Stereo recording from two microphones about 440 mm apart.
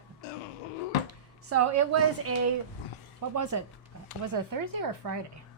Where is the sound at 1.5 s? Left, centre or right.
Right.